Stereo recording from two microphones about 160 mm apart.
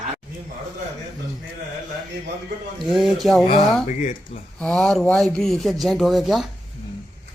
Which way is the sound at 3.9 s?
50° left (ahead or behind).